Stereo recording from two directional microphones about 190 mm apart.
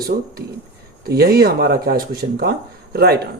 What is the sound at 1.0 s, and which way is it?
Speech, 55° right (ahead or behind).